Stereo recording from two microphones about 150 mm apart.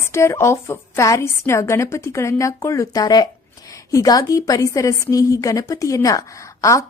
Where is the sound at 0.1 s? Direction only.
20° left (ahead or behind).